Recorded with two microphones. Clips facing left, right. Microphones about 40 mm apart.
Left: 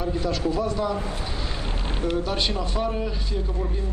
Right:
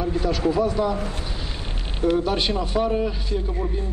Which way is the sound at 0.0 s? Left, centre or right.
Centre.